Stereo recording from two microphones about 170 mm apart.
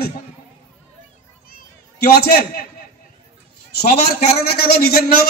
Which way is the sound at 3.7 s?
65° left (ahead or behind).